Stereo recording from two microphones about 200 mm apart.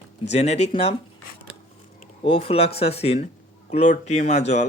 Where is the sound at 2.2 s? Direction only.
30° left (ahead or behind).